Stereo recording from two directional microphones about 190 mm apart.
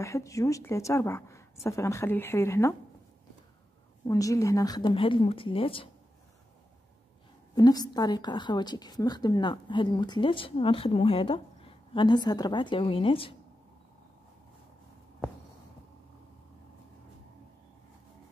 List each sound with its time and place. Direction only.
0.0 s a woman's voice: 15° left (ahead or behind)
4.1 s a woman's voice: 15° left (ahead or behind)
7.5 s a woman's voice: 20° left (ahead or behind)